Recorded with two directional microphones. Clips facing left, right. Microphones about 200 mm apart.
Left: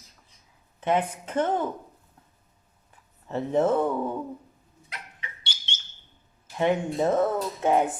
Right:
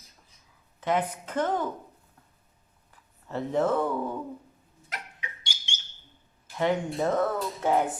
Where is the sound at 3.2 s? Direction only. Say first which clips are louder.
Left 3 dB; 20° left (ahead or behind).